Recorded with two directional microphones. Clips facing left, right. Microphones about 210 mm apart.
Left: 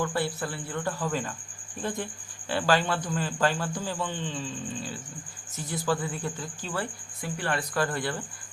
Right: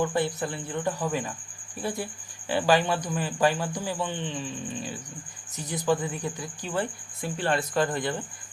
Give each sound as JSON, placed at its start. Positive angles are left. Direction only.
{"t": 0.0, "sound": "a man's voice", "side_deg": -20}
{"t": 7.2, "sound": "speech", "side_deg": -25}